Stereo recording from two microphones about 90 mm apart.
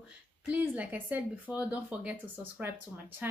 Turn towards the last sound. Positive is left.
turn(degrees=-20)  # may be behind; listen again after turning